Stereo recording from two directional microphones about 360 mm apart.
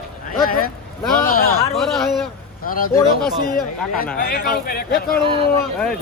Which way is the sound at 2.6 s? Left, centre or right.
Left.